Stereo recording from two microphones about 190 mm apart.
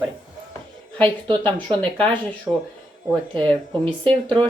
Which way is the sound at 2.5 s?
10° right (ahead or behind).